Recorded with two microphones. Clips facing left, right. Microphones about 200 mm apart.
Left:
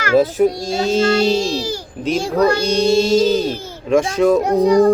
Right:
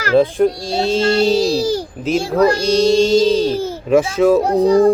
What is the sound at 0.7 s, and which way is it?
Speech, 35° right (ahead or behind).